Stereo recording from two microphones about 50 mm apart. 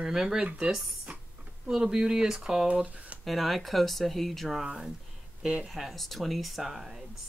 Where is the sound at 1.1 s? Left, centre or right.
Right.